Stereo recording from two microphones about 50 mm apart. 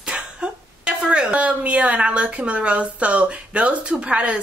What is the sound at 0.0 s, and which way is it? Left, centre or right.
Speech, centre.